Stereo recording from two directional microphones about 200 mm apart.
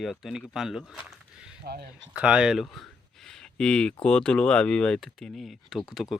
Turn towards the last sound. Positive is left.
turn(degrees=0)  # may be behind; listen again after turning